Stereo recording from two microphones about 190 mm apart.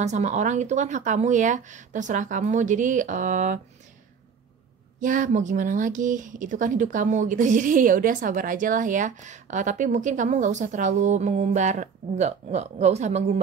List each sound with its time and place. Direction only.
0.0 s speech: 35° right (ahead or behind)
5.0 s speech: 45° right (ahead or behind)